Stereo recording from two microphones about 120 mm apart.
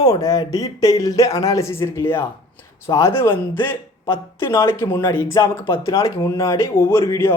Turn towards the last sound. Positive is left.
turn(degrees=25)  # may be behind; listen again after turning